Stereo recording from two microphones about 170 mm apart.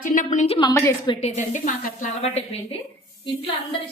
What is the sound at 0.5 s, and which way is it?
Speech, 25° left (ahead or behind).